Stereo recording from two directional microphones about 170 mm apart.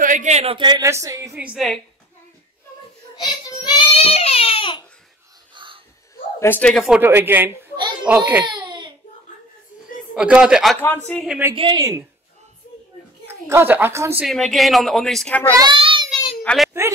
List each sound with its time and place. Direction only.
0.0 s a woman's voice: 45° right (ahead or behind); by 1.4 s 20° right (ahead or behind)
1.4 s speech: 5° right (ahead or behind)
3.2 s child singing: 25° left (ahead or behind)
5.5 s a sound: 30° right (ahead or behind)
6.4 s speech: 10° left (ahead or behind)
7.0 s a woman's voice: 10° right (ahead or behind)
8.5 s baby cry: 25° right (ahead or behind)
10.1 s speech: 5° right (ahead or behind)
11.5 s a woman's voice: 30° right (ahead or behind)
13.3 s a woman's voice: 15° right (ahead or behind)
14.2 s speech: centre (ahead or behind)
15.5 s a sound: 25° right (ahead or behind)
16.4 s a sound: centre (ahead or behind)